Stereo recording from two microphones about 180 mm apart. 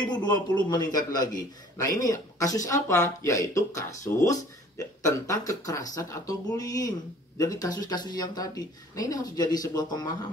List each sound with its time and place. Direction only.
0.0 s a man's voice: 25° left (ahead or behind)